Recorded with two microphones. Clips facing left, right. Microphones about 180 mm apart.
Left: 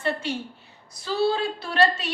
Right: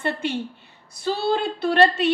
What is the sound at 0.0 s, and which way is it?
A woman's voice, 55° right (ahead or behind).